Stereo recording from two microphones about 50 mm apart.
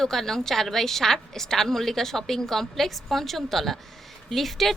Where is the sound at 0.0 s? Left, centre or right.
Centre.